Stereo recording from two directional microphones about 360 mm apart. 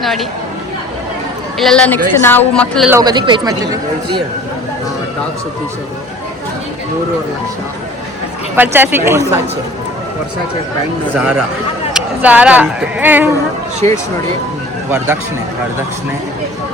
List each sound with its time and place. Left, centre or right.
0.0 s speech: centre
1.5 s speech: centre
3.0 s speech: centre
8.5 s speech: centre
11.2 s speech: centre
13.8 s speech: centre